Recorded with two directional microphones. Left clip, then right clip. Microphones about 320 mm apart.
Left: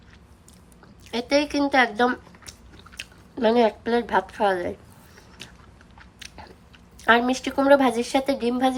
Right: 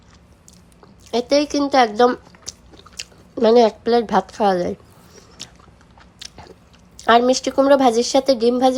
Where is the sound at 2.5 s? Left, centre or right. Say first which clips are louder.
Right 7 dB; right.